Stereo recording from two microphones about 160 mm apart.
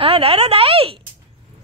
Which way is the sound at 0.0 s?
35° right (ahead or behind).